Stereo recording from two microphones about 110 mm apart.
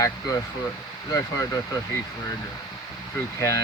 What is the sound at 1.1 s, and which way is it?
Speech, 30° left (ahead or behind).